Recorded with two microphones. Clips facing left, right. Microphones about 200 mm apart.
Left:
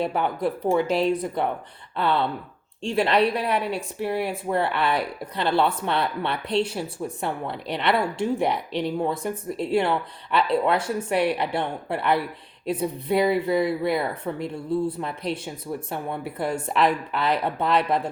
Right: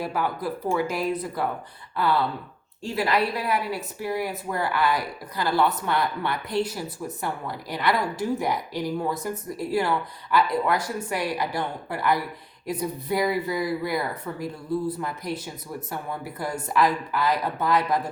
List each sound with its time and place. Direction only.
0.0 s speech: 25° left (ahead or behind)
2.0 s speech: 25° left (ahead or behind)